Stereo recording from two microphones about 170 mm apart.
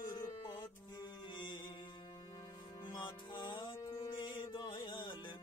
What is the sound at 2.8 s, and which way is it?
Music, 25° left (ahead or behind).